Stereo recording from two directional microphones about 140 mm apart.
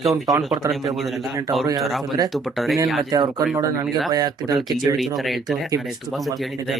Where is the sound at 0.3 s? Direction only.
20° right (ahead or behind).